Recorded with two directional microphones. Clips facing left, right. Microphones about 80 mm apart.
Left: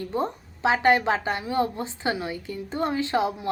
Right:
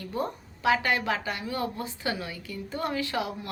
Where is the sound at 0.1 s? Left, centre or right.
Left.